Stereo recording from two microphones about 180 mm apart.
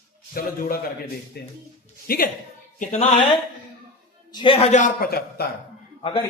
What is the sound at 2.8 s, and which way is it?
Speech, 45° left (ahead or behind).